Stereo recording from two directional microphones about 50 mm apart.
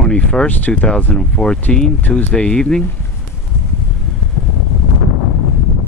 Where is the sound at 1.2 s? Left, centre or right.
Centre.